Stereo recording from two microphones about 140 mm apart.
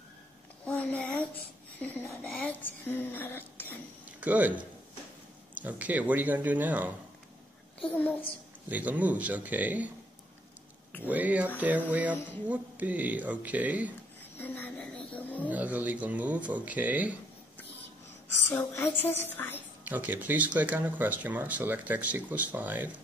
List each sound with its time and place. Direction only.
0.7 s a sound: 5° left (ahead or behind)
1.8 s speech: 10° left (ahead or behind)
4.2 s speech: 10° right (ahead or behind)
7.8 s speech: 10° left (ahead or behind)
8.6 s speech: 10° right (ahead or behind)
11.1 s speech: 10° right (ahead or behind)
14.4 s a sound: 15° left (ahead or behind)
15.5 s speech: 10° right (ahead or behind)
18.5 s speech: 15° left (ahead or behind)
19.8 s speech: 10° right (ahead or behind)